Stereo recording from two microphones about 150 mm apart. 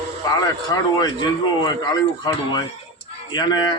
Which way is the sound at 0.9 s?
25° left (ahead or behind).